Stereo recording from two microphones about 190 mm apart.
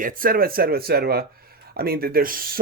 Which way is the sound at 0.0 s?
45° right (ahead or behind).